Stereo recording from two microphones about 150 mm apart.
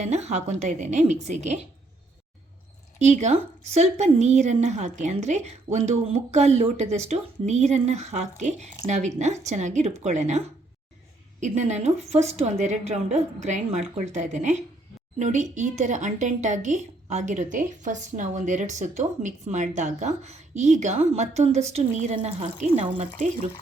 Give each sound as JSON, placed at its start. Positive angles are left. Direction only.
{"t": 0.0, "sound": "speech", "side_deg": -50}
{"t": 3.0, "sound": "speech", "side_deg": -50}